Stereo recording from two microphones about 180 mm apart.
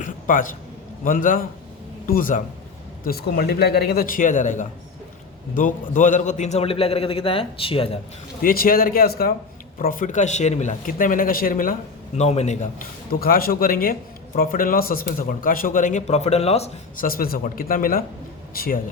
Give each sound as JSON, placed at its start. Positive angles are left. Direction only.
{"t": 0.0, "sound": "a sound", "side_deg": 45}
{"t": 1.0, "sound": "a man's voice", "side_deg": 50}
{"t": 8.4, "sound": "a man's voice", "side_deg": 55}
{"t": 13.1, "sound": "a man's voice", "side_deg": 55}
{"t": 17.0, "sound": "a man's voice", "side_deg": 55}